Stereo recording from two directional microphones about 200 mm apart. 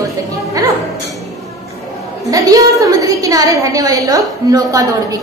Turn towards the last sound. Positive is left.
turn(degrees=-15)  # may be behind; listen again after turning